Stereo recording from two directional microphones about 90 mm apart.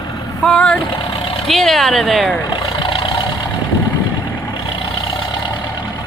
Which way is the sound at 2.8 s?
70° left (ahead or behind).